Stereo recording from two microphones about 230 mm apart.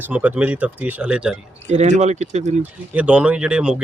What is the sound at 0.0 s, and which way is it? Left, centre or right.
Speech, centre.